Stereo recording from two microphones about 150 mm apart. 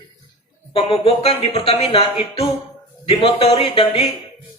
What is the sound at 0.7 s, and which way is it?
A man's voice, 35° left (ahead or behind).